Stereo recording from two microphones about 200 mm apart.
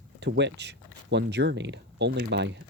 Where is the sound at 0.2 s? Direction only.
60° right (ahead or behind).